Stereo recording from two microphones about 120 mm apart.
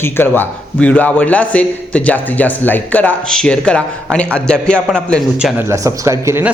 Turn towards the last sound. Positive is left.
turn(degrees=-25)  # may be behind; listen again after turning